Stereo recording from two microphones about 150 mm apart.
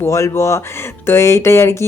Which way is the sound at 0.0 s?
20° left (ahead or behind).